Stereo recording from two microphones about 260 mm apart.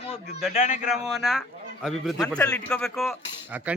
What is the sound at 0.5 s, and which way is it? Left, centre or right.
Speech, left.